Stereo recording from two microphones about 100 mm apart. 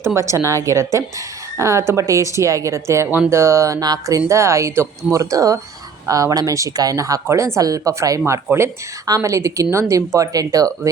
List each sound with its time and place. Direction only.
0.0 s a woman's voice: 30° right (ahead or behind)
8.4 s a woman's voice: 25° right (ahead or behind)